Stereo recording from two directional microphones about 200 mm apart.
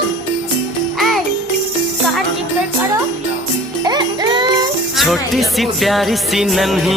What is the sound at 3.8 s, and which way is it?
Music, 20° right (ahead or behind).